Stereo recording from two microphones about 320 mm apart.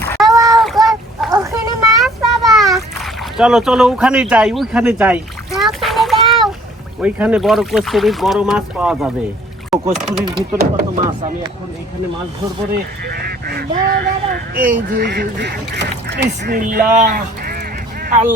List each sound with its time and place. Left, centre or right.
0.0 s child singing: centre
0.3 s child singing: centre
0.5 s child singing: centre
1.3 s a sound: centre
2.0 s splash: centre
7.0 s speech: centre
10.2 s speech: centre
10.6 s speech: right
12.7 s honk: right
14.9 s speech: right